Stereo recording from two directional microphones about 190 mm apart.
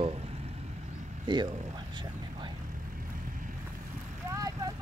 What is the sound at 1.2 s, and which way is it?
Speech, 25° right (ahead or behind).